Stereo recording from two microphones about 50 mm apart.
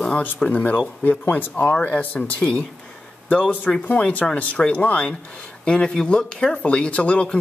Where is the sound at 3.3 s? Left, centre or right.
Left.